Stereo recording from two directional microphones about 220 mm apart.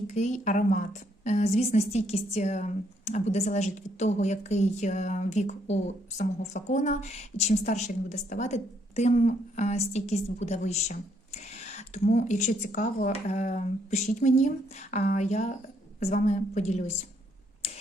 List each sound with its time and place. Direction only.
0.1 s a woman's voice: 35° left (ahead or behind)